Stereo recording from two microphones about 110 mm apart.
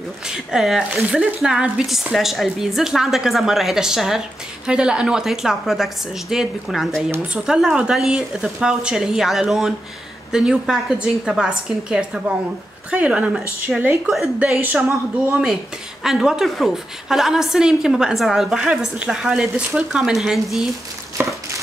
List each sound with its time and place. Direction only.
0.3 s a woman's voice: 5° right (ahead or behind)
2.1 s a woman's voice: centre (ahead or behind)
16.0 s a woman's voice: 5° right (ahead or behind)
21.2 s a sound: 20° right (ahead or behind)